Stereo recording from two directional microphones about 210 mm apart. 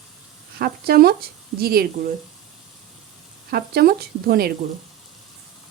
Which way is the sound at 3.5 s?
45° right (ahead or behind).